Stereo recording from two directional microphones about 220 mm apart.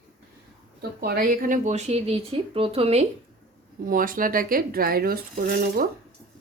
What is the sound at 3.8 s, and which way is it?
Speech, 40° right (ahead or behind).